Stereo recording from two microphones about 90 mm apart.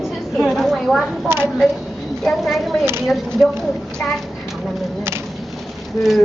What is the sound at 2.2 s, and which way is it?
Speech, centre (ahead or behind).